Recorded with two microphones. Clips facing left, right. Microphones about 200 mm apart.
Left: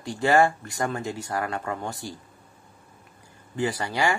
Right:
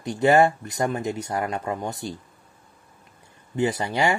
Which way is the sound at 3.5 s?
20° right (ahead or behind).